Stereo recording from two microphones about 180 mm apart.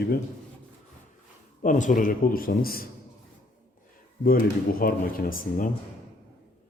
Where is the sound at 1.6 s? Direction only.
45° left (ahead or behind).